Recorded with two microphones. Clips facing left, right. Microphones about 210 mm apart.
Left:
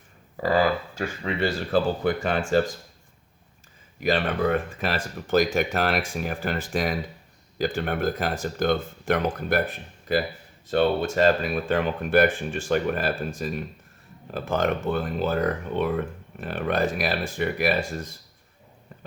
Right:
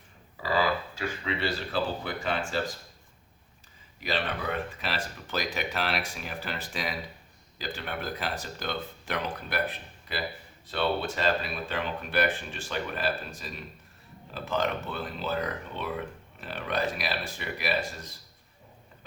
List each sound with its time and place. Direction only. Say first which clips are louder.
0.3 s speech: left 6 dB; 50° left (ahead or behind)
4.0 s speech: left 8 dB; 50° left (ahead or behind)